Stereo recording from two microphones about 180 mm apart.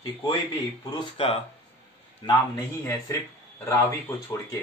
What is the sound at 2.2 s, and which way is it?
Speech, 25° left (ahead or behind).